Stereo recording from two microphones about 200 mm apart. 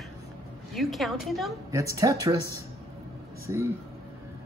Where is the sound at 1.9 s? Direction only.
15° right (ahead or behind).